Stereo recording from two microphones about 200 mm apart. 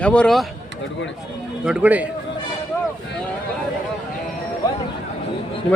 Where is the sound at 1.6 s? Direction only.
5° right (ahead or behind).